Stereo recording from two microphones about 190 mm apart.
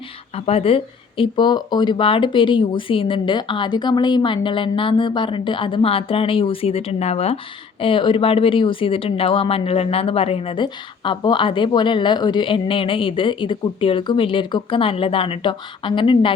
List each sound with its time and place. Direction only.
0.3 s speech: 30° left (ahead or behind)